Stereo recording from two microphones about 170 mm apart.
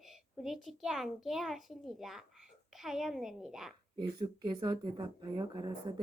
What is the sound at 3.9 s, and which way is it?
Speech, 25° right (ahead or behind).